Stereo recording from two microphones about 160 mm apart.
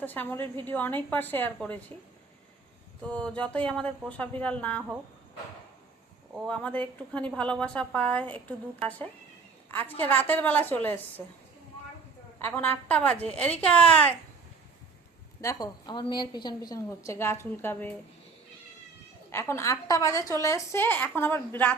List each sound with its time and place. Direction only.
0.0 s a woman's voice: 10° left (ahead or behind)
3.0 s a woman's voice: 5° left (ahead or behind)
6.5 s a woman's voice: 5° left (ahead or behind)
9.6 s a woman's voice: 10° left (ahead or behind)
12.4 s a woman's voice: 15° left (ahead or behind)
15.4 s a woman's voice: 20° left (ahead or behind)
19.3 s a woman's voice: 15° left (ahead or behind)